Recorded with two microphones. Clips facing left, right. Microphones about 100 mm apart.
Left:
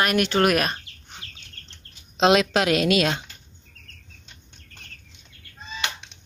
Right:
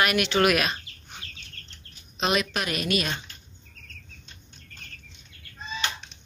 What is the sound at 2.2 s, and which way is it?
A woman's voice, 90° left.